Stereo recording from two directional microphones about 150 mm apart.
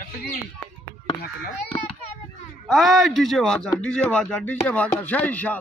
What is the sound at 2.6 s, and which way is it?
A man's voice, centre (ahead or behind).